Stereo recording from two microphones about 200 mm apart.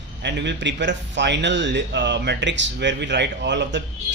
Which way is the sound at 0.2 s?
60° right (ahead or behind).